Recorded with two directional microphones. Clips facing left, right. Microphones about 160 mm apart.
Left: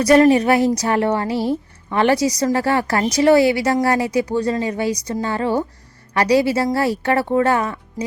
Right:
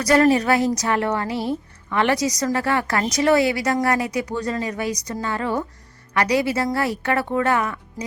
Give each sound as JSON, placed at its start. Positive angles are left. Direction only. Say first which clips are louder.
{"t": 0.0, "sound": "a woman's voice", "louder": "left 4 dB", "side_deg": 25}